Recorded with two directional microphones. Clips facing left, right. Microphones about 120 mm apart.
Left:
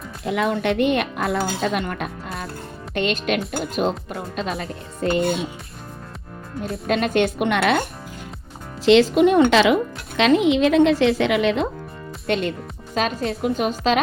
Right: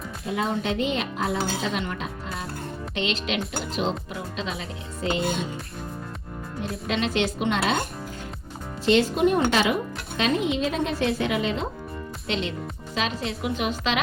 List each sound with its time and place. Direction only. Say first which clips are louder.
0.3 s speech: left 5 dB; 70° left (ahead or behind); by 5.3 s 55° left (ahead or behind)
6.8 s speech: left 6 dB; 50° left (ahead or behind)
8.8 s speech: left 6 dB; 90° left; by 11.7 s 75° left (ahead or behind)
12.3 s speech: left 6 dB; 50° left (ahead or behind)